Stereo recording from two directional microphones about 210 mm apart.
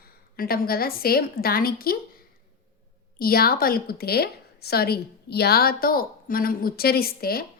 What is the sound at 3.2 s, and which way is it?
A woman's voice, 45° left (ahead or behind).